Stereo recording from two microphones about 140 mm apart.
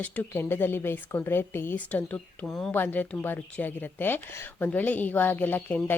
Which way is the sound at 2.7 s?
15° left (ahead or behind).